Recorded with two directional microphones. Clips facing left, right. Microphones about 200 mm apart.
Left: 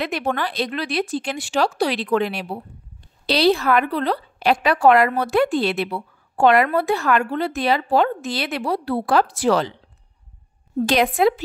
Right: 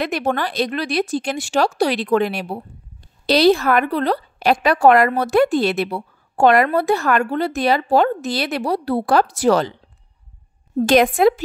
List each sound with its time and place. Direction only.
0.0 s a woman's voice: 45° right (ahead or behind)
10.8 s a woman's voice: 45° right (ahead or behind)